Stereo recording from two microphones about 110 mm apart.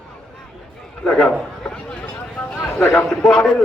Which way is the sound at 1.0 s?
10° left (ahead or behind).